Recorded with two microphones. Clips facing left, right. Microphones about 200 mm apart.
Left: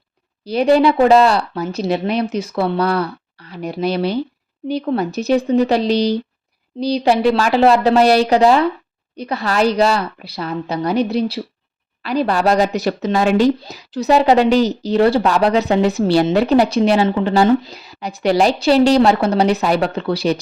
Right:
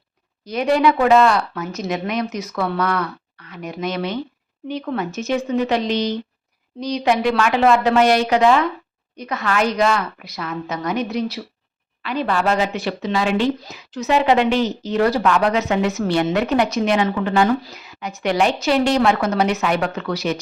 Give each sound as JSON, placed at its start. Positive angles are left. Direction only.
{"t": 0.4, "sound": "speech", "side_deg": 30}